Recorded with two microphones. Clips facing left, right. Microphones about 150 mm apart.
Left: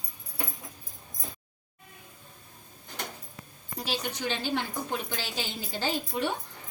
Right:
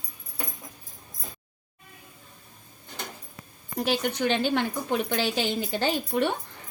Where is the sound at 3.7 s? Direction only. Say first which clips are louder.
Right 7 dB; 60° right (ahead or behind).